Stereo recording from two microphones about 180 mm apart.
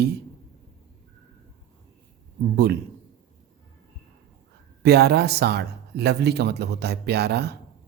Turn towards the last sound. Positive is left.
turn(degrees=-65)  # may be behind; listen again after turning